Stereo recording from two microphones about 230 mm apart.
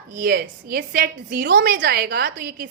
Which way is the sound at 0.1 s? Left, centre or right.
Right.